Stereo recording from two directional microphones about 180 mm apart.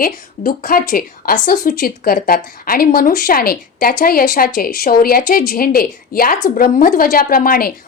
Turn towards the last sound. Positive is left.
turn(degrees=55)  # may be behind; listen again after turning